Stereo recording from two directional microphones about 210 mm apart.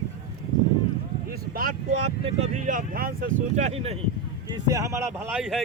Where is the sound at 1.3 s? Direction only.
45° right (ahead or behind).